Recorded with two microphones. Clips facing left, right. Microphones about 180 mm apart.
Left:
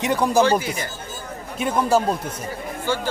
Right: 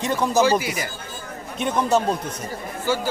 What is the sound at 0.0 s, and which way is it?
Speech, 15° left (ahead or behind).